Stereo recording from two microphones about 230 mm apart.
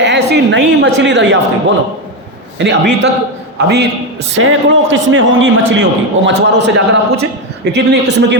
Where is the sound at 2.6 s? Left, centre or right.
Right.